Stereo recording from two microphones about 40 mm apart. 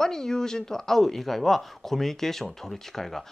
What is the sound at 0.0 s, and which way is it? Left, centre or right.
Speech, centre.